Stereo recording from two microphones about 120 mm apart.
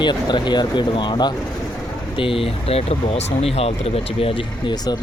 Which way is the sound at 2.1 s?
50° left (ahead or behind).